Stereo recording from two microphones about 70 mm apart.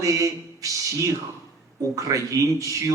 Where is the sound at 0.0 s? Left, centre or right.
Right.